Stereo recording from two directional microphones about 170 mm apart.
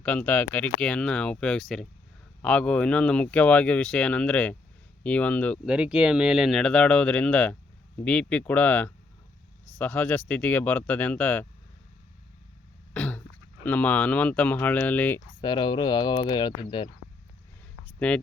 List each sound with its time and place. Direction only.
0.0 s speech: 10° left (ahead or behind)
5.6 s speech: 5° right (ahead or behind); by 11.4 s 10° left (ahead or behind)
12.9 s cough: 10° left (ahead or behind)
13.7 s speech: 10° left (ahead or behind)
15.4 s speech: 25° left (ahead or behind)
18.0 s speech: 5° left (ahead or behind)